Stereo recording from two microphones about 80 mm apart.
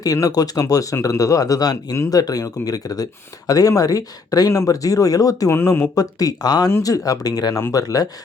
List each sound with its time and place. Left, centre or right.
0.0 s speech: left
5.5 s speech: left
5.9 s speech: left